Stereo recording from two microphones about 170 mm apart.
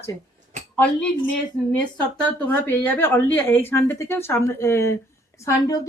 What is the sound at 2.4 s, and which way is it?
Speech, 10° left (ahead or behind).